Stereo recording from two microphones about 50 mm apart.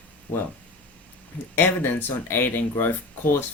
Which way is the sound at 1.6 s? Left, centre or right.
Left.